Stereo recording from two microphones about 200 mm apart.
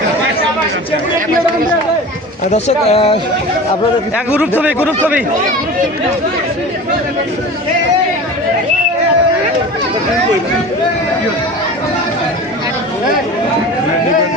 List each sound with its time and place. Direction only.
2.5 s speech: 30° left (ahead or behind)
4.6 s speech: 5° right (ahead or behind)